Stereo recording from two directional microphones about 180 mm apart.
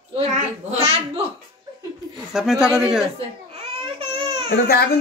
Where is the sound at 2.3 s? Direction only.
Centre (ahead or behind).